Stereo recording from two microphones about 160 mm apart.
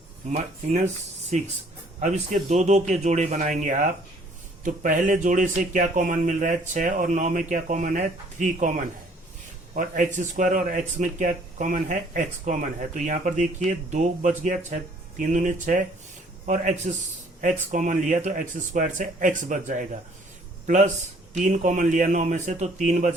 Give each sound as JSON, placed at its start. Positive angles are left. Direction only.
{"t": 0.3, "sound": "speech", "side_deg": -45}